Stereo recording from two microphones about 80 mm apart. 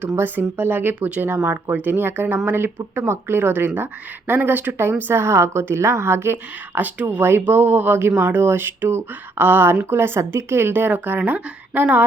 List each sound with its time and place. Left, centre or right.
0.2 s speech: right
1.4 s speech: right
1.7 s speech: right